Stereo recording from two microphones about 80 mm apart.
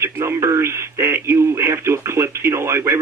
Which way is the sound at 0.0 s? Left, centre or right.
Right.